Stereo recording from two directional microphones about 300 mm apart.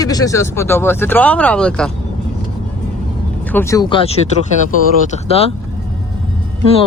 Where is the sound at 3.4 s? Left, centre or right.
Centre.